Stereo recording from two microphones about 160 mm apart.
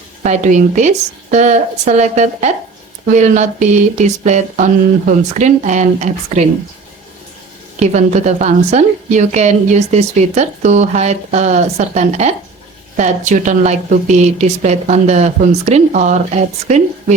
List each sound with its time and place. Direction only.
0.2 s a woman's voice: 50° right (ahead or behind)
7.8 s a woman's voice: 45° right (ahead or behind)